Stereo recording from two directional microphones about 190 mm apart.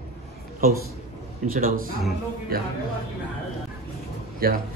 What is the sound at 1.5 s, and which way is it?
A man's voice, 50° right (ahead or behind).